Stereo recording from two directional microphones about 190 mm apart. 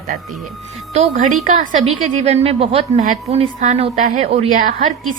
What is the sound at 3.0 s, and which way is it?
A woman's voice, 45° right (ahead or behind).